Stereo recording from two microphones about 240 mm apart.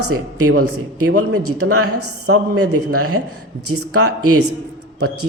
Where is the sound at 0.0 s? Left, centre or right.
Right.